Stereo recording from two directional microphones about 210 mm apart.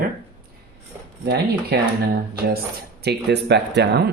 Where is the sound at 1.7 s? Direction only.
50° right (ahead or behind).